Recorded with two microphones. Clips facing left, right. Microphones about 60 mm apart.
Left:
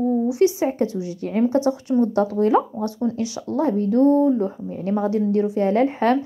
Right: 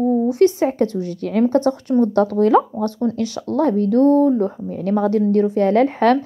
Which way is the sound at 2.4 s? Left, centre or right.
Right.